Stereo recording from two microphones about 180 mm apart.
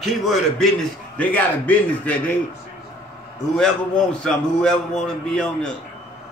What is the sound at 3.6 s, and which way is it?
A man's voice, 5° left (ahead or behind).